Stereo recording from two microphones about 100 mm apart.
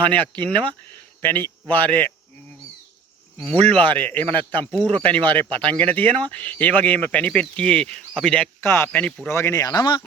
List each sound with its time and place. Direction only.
0.1 s speech: 15° left (ahead or behind)
3.3 s speech: 10° left (ahead or behind)
8.6 s speech: 25° left (ahead or behind)
9.3 s speech: 30° left (ahead or behind); by 10.0 s 50° left (ahead or behind)